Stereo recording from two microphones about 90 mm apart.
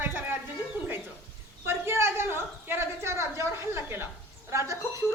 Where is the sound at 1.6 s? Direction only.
25° right (ahead or behind).